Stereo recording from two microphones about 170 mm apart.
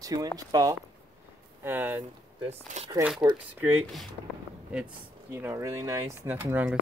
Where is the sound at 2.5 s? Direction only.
40° right (ahead or behind).